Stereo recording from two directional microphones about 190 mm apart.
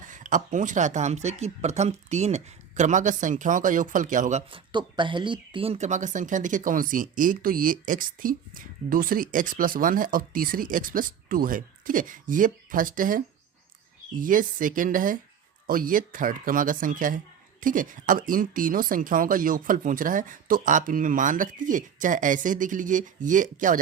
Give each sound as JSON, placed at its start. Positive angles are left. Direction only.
{"t": 0.0, "sound": "speech", "side_deg": -45}
{"t": 4.7, "sound": "speech", "side_deg": -25}